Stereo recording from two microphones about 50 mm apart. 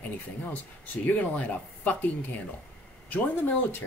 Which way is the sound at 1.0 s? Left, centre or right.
Left.